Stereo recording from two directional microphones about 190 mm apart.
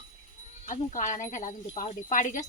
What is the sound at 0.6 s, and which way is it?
Speech, 40° left (ahead or behind).